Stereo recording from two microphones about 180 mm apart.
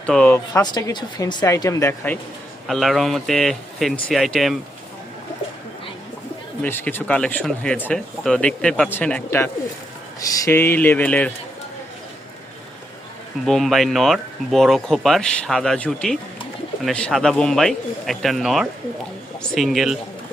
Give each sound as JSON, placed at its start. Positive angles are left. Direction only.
{"t": 0.0, "sound": "speech", "side_deg": 5}
{"t": 2.6, "sound": "speech", "side_deg": 0}
{"t": 6.6, "sound": "speech", "side_deg": 10}
{"t": 13.4, "sound": "speech", "side_deg": 0}